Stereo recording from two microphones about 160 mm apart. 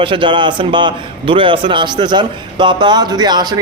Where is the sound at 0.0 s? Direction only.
30° right (ahead or behind).